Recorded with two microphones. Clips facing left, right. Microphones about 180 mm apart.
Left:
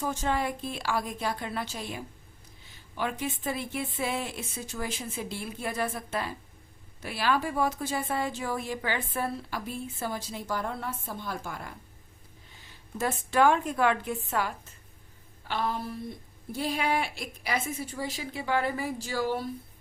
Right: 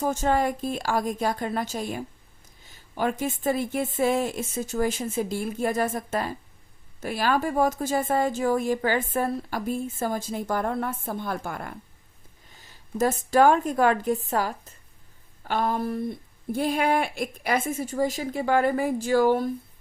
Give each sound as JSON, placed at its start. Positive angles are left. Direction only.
{"t": 0.0, "sound": "speech", "side_deg": -45}
{"t": 12.6, "sound": "a woman's voice", "side_deg": -40}